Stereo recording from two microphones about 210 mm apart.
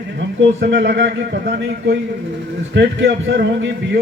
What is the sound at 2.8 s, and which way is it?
Speech, 55° right (ahead or behind).